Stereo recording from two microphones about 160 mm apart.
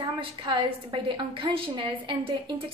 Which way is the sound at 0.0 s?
30° right (ahead or behind).